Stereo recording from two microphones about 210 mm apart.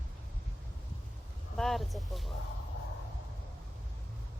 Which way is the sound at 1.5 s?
Centre (ahead or behind).